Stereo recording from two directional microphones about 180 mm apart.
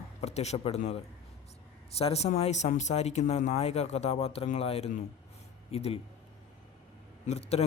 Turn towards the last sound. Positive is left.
turn(degrees=35)  # may be behind; listen again after turning